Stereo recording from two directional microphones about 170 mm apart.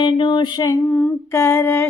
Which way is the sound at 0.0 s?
30° left (ahead or behind).